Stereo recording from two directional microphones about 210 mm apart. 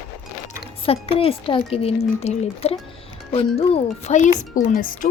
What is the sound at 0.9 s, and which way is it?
Speech, 25° left (ahead or behind).